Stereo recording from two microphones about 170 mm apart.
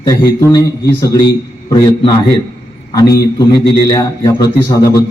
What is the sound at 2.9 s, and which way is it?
A man's voice, 20° left (ahead or behind).